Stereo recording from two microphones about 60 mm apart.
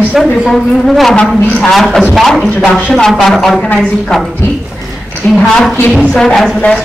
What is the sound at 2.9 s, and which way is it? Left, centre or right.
Brass instrument, centre.